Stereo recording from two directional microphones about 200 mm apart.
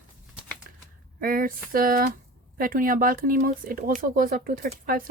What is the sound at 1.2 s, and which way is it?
A woman's voice, 45° right (ahead or behind).